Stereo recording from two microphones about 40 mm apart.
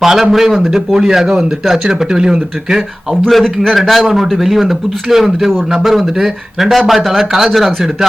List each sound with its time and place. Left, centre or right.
0.0 s speech: centre
0.9 s speech: centre
3.4 s a man's voice: centre
3.8 s speech: centre